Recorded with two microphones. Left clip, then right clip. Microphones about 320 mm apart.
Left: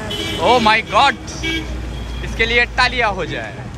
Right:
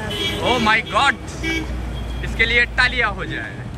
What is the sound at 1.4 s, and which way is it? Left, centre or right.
Speech, centre.